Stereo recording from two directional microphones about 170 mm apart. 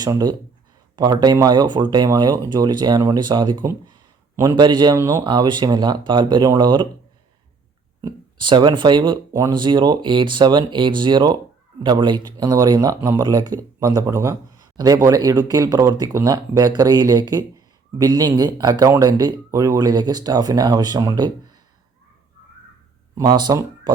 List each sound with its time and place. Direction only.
0.0 s a man's voice: 25° right (ahead or behind)
4.6 s speech: 25° right (ahead or behind)
8.0 s speech: 25° right (ahead or behind)
23.1 s speech: 25° right (ahead or behind)